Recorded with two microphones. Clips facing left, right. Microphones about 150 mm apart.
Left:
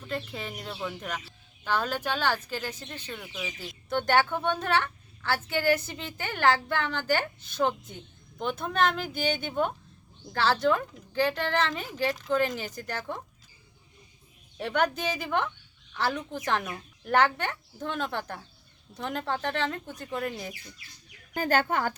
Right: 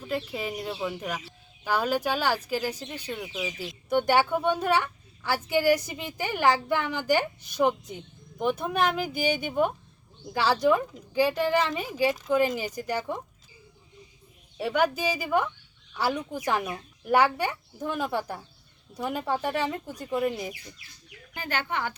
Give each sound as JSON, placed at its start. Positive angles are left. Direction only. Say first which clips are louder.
{"t": 0.0, "sound": "speech", "louder": "right 4 dB", "side_deg": -10}
{"t": 14.6, "sound": "speech", "louder": "right 2 dB", "side_deg": -5}
{"t": 21.3, "sound": "speech", "louder": "left 5 dB", "side_deg": 45}